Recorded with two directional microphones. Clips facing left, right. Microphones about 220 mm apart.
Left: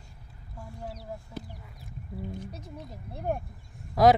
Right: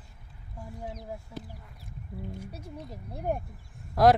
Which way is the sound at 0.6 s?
15° right (ahead or behind).